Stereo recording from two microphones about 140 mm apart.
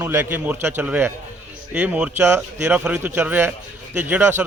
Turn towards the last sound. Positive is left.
turn(degrees=-15)  # may be behind; listen again after turning